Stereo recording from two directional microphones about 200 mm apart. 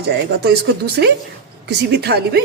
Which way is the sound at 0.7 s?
55° right (ahead or behind).